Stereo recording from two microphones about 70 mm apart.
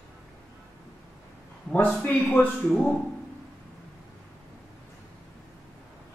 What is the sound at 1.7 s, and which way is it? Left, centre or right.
A man's voice, centre.